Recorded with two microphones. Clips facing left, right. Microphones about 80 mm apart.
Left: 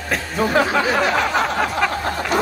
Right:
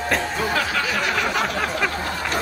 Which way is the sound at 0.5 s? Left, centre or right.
Left.